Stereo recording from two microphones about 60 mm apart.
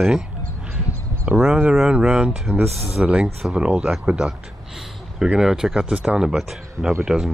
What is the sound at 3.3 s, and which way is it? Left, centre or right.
Speech, centre.